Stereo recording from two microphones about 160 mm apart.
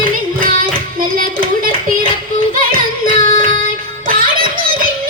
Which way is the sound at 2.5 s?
60° right (ahead or behind).